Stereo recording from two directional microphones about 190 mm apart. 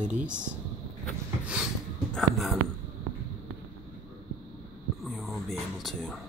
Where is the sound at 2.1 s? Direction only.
Centre (ahead or behind).